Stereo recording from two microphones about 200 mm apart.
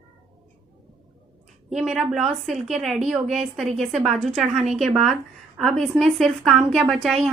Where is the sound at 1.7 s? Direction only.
Centre (ahead or behind).